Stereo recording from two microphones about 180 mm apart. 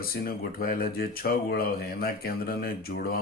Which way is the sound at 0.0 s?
55° left (ahead or behind).